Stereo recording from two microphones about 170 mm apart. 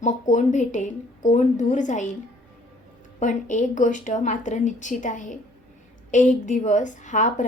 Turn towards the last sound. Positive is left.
turn(degrees=45)  # may be behind; listen again after turning